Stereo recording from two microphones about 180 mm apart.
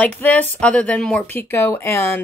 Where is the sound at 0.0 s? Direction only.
10° left (ahead or behind).